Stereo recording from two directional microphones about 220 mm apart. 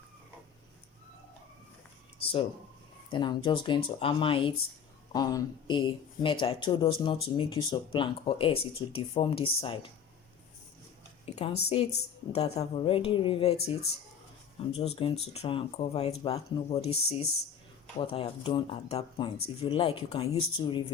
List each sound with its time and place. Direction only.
2.2 s speech: 25° left (ahead or behind)
11.3 s speech: 30° left (ahead or behind)